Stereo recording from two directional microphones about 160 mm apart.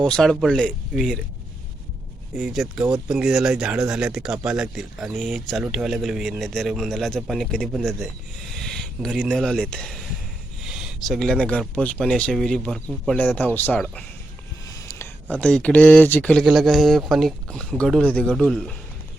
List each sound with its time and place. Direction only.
0.0 s speech: 5° left (ahead or behind)
2.4 s speech: centre (ahead or behind)
10.6 s a sound: 5° right (ahead or behind)
11.7 s speech: 10° left (ahead or behind)
14.7 s a sound: 20° left (ahead or behind)
15.4 s speech: 5° left (ahead or behind)